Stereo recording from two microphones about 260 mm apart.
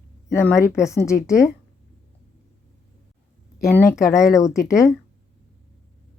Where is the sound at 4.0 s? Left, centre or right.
Centre.